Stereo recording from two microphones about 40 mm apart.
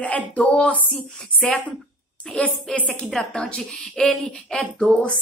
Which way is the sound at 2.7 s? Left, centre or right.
Left.